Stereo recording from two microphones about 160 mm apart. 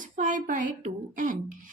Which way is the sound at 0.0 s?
55° right (ahead or behind).